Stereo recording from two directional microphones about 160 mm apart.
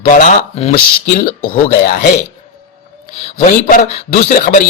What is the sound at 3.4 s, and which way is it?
A man's voice, 50° left (ahead or behind).